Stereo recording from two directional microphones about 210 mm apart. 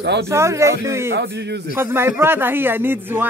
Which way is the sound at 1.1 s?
55° right (ahead or behind).